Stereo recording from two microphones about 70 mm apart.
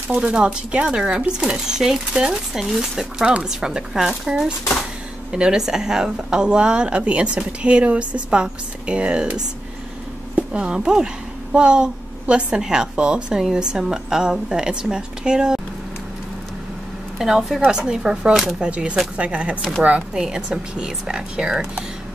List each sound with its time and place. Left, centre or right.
0.1 s speech: centre
17.2 s a woman's voice: centre